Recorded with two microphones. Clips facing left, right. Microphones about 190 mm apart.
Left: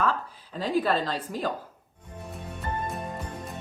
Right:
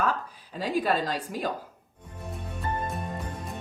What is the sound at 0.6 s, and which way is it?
Speech, 10° right (ahead or behind).